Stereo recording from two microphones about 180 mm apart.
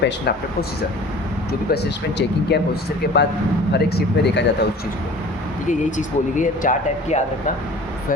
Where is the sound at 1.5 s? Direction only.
65° left (ahead or behind).